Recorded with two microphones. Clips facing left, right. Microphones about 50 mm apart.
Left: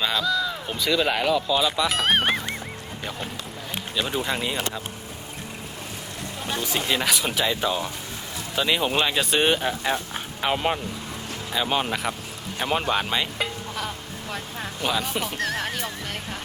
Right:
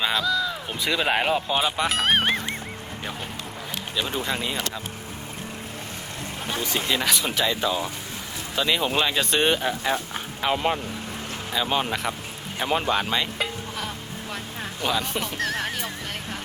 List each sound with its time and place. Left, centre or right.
0.0 s music: centre
0.8 s speech: centre
1.1 s speech: right
1.9 s music: centre
3.9 s speech: centre
6.7 s speech: centre